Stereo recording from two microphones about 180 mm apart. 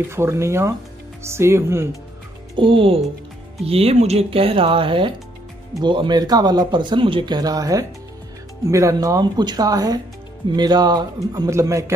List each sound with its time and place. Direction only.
0.1 s speech: 15° right (ahead or behind)
2.5 s a man's voice: 30° right (ahead or behind)